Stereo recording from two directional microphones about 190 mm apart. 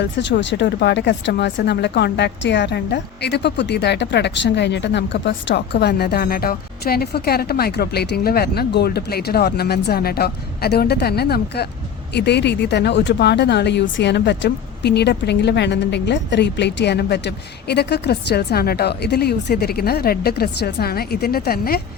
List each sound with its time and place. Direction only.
0.0 s speech: 70° left (ahead or behind); by 21.8 s 55° left (ahead or behind)